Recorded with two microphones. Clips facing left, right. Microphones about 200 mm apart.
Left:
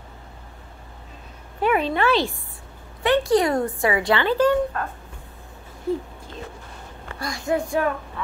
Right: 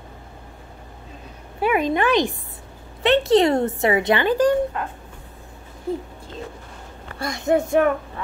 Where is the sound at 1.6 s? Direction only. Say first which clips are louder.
Right 1 dB; 10° right (ahead or behind).